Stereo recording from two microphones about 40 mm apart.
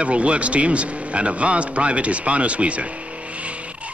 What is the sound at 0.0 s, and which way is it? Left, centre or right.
A man's voice, right.